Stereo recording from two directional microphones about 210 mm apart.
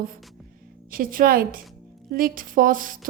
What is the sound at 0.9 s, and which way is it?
A woman's voice, 45° right (ahead or behind).